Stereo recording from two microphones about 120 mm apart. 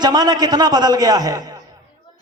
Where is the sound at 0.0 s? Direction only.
35° right (ahead or behind).